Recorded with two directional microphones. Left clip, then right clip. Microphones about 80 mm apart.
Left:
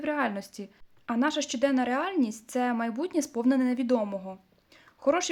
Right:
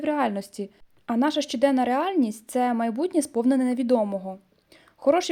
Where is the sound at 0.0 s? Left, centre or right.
Right.